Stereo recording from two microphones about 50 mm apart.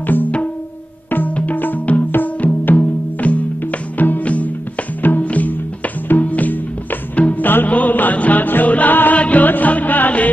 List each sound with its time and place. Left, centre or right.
0.0 s music: left